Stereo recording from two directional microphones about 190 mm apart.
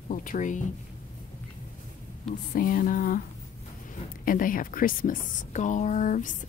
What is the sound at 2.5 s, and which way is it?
Speech, 50° left (ahead or behind).